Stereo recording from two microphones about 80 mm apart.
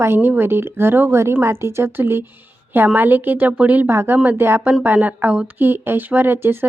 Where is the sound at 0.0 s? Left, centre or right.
Right.